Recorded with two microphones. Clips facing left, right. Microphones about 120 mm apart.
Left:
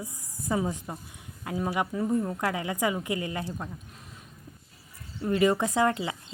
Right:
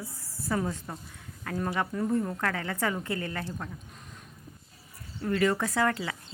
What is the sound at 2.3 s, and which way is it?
Speech, 15° left (ahead or behind).